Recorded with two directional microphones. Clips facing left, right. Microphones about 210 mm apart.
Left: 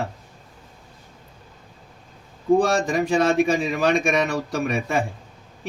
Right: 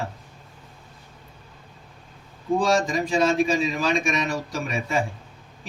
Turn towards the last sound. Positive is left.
turn(degrees=60)  # may be behind; listen again after turning